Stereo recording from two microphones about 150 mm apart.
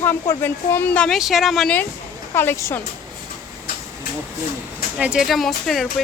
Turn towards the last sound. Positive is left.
turn(degrees=0)  # may be behind; listen again after turning